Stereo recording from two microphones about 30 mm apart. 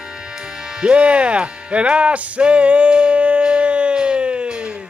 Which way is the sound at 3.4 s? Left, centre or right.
Right.